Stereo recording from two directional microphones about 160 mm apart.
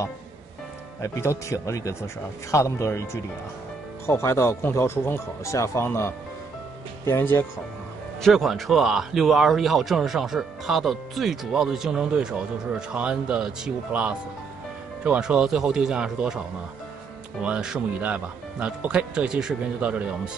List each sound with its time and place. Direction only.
1.0 s speech: 20° left (ahead or behind)
8.2 s a man's voice: centre (ahead or behind)
17.4 s speech: 5° right (ahead or behind)